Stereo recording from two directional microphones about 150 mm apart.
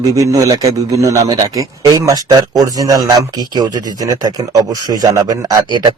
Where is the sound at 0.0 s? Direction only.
20° right (ahead or behind).